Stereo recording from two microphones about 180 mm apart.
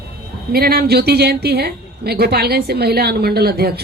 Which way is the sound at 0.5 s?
60° right (ahead or behind).